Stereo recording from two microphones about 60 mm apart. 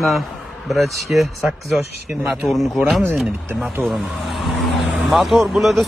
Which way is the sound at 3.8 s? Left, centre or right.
Centre.